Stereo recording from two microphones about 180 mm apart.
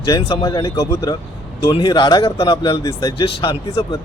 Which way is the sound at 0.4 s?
15° left (ahead or behind).